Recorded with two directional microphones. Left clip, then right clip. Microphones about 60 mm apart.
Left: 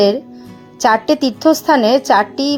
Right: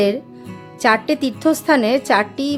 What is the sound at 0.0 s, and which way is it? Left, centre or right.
Speech, centre.